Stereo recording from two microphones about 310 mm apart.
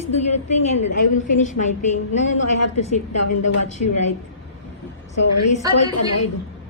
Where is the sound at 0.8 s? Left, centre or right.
Left.